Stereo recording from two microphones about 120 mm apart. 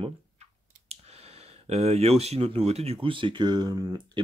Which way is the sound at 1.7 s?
60° right (ahead or behind).